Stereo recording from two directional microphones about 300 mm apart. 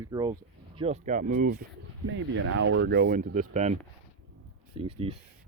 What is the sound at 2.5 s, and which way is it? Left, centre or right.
Speech, right.